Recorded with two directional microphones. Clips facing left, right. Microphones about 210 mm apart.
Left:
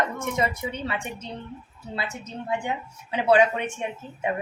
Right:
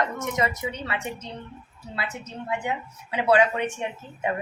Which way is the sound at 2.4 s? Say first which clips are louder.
Left 1 dB; 25° left (ahead or behind).